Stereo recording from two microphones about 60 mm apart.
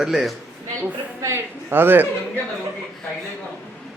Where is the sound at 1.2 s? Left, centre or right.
Right.